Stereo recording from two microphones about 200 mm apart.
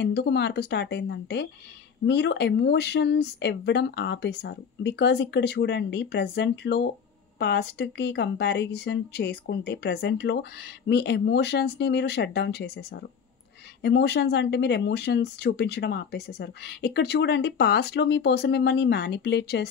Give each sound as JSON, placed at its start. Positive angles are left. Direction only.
{"t": 0.0, "sound": "speech", "side_deg": 55}